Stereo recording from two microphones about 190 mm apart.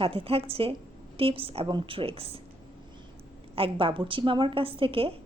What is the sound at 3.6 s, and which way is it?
A woman's voice, 25° right (ahead or behind).